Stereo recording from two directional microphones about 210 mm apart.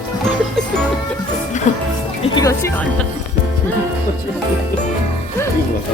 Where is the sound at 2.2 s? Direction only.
15° left (ahead or behind).